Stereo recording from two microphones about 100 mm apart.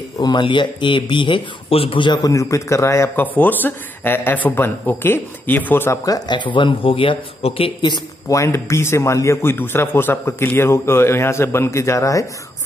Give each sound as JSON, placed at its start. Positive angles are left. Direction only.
{"t": 0.2, "sound": "speech", "side_deg": 50}
{"t": 2.2, "sound": "a man's voice", "side_deg": 35}
{"t": 6.0, "sound": "speech", "side_deg": 45}
{"t": 8.3, "sound": "a man's voice", "side_deg": 25}